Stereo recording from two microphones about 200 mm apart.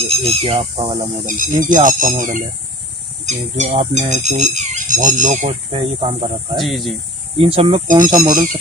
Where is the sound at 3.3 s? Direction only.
35° right (ahead or behind).